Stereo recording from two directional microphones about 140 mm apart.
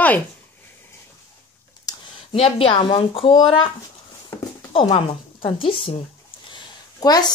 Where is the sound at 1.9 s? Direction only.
25° left (ahead or behind).